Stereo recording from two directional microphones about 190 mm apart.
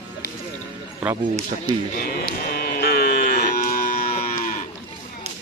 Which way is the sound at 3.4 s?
45° left (ahead or behind).